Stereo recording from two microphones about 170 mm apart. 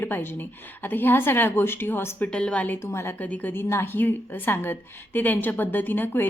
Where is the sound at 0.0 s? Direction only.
10° left (ahead or behind).